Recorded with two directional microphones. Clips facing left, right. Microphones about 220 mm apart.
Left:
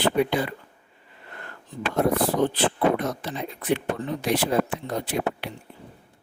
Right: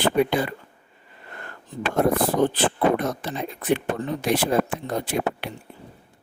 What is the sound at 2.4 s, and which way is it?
Speech, 45° right (ahead or behind).